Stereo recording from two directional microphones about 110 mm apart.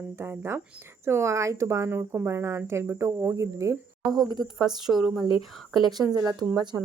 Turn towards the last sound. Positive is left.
turn(degrees=-40)  # may be behind; listen again after turning